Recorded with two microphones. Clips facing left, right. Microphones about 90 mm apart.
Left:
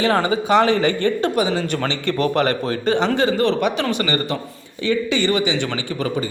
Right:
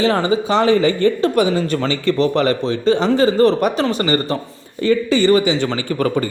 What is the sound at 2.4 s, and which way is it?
Speech, 40° left (ahead or behind).